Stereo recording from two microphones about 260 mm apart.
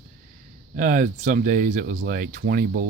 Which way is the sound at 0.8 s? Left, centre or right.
Right.